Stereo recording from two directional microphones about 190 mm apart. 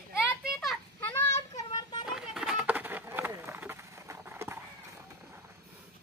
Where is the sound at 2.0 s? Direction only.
5° right (ahead or behind).